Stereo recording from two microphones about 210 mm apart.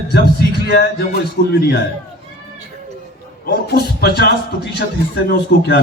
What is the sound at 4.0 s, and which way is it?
Speech, 50° left (ahead or behind).